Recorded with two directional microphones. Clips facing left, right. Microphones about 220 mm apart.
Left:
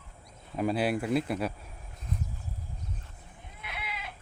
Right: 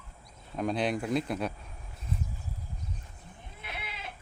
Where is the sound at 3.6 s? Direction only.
25° right (ahead or behind).